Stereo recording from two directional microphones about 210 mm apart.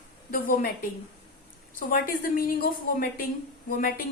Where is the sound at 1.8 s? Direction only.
40° left (ahead or behind).